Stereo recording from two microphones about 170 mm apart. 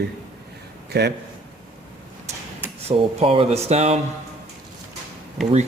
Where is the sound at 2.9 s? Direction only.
35° right (ahead or behind).